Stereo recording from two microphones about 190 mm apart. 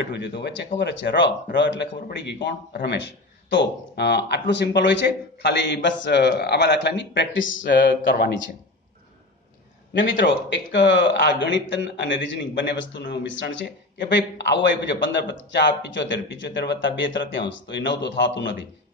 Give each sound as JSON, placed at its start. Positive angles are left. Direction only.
{"t": 0.0, "sound": "a man's voice", "side_deg": 65}
{"t": 8.0, "sound": "a man's voice", "side_deg": 65}
{"t": 9.9, "sound": "a man's voice", "side_deg": 75}